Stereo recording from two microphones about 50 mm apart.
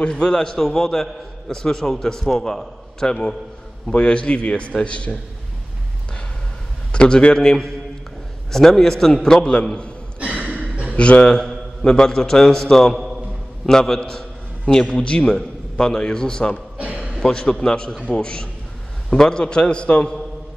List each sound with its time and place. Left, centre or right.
0.0 s a man's voice: centre
6.9 s a man's voice: centre
10.2 s a sound: right
11.0 s a man's voice: left
16.7 s a sound: right
17.2 s a man's voice: centre